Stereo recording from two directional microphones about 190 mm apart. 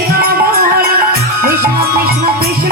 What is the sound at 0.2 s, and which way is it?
Music, 55° right (ahead or behind).